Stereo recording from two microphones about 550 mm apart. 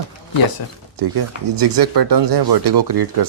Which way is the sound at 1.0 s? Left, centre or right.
Right.